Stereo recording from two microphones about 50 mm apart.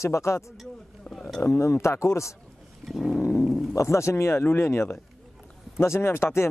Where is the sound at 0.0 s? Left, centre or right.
Left.